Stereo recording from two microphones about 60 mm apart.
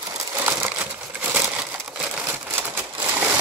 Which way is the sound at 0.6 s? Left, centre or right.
Right.